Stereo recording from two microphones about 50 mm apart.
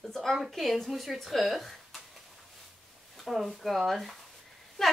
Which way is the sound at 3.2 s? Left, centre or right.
Centre.